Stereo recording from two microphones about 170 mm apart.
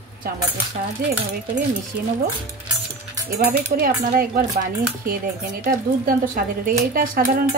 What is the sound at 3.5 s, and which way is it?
A woman's voice, 60° right (ahead or behind).